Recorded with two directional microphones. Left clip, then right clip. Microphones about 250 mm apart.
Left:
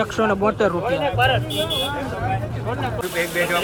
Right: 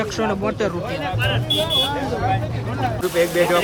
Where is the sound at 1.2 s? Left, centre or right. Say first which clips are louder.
Left 6 dB; centre.